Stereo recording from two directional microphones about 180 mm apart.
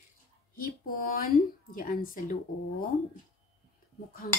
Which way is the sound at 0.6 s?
50° left (ahead or behind).